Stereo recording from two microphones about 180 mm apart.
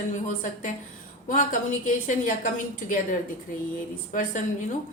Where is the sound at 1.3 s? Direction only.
45° left (ahead or behind).